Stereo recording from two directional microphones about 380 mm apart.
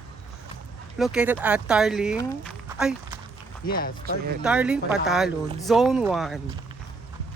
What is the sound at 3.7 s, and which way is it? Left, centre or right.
Speech, left.